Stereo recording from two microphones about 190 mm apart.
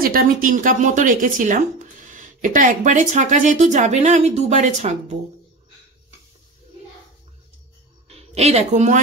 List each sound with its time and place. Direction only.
0.0 s a woman's voice: 50° right (ahead or behind)
8.1 s a woman's voice: 35° right (ahead or behind)